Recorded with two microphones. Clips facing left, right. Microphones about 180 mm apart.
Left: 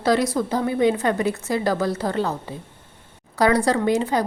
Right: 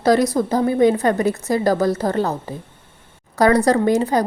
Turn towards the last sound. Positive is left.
turn(degrees=-40)  # may be behind; listen again after turning